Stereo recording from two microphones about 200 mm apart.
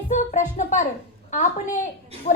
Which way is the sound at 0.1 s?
40° left (ahead or behind).